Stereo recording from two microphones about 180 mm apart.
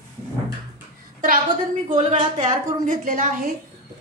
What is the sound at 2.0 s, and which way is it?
A woman's voice, 40° right (ahead or behind).